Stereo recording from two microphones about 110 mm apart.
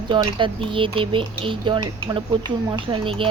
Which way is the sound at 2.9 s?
50° right (ahead or behind).